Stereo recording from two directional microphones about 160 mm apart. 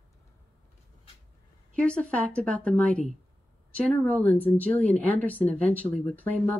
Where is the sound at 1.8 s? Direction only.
5° left (ahead or behind).